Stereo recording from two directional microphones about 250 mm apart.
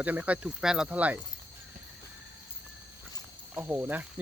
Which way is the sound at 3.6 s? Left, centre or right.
Centre.